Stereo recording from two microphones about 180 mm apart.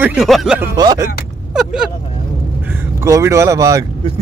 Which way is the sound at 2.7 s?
15° right (ahead or behind).